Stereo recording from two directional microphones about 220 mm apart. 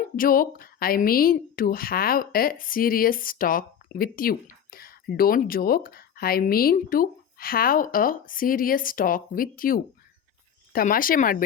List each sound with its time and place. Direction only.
0.2 s a woman's voice: 40° left (ahead or behind)